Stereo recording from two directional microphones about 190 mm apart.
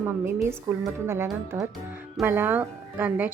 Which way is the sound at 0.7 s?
15° right (ahead or behind).